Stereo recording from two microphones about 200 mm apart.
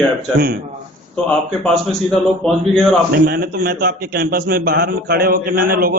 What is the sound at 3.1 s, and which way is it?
A man's voice, 50° right (ahead or behind).